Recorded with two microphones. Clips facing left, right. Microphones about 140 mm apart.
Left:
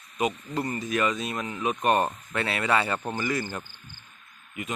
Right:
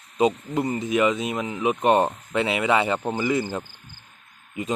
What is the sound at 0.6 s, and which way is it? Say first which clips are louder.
Speech: right 5 dB; 20° right (ahead or behind).